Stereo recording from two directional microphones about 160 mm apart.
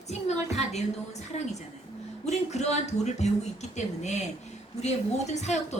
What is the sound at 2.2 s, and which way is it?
A woman's voice, 45° left (ahead or behind).